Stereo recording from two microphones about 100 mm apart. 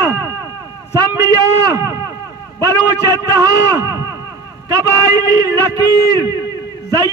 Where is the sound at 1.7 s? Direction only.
30° right (ahead or behind).